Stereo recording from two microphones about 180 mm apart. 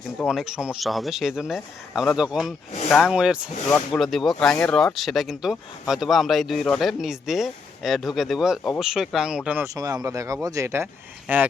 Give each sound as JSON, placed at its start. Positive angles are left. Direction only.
{"t": 0.2, "sound": "speech", "side_deg": 0}